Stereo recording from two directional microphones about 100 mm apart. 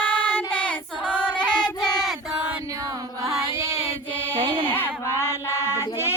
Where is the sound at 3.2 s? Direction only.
30° right (ahead or behind).